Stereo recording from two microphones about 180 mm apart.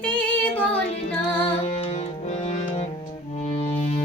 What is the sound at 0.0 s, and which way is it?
Child singing, 10° left (ahead or behind).